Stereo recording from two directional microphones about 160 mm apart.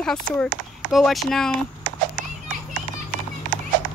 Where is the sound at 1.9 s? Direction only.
55° right (ahead or behind).